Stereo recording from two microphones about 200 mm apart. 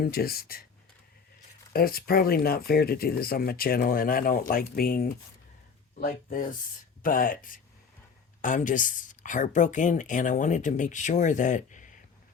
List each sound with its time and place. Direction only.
0.0 s speech: 50° left (ahead or behind)
1.7 s speech: 50° left (ahead or behind)